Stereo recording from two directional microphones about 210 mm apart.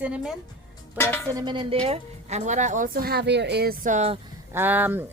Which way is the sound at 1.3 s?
20° right (ahead or behind).